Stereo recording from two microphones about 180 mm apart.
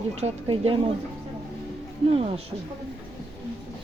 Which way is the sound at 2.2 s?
35° right (ahead or behind).